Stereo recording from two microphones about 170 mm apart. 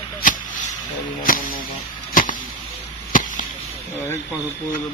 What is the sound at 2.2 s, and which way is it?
Arrow, 55° left (ahead or behind).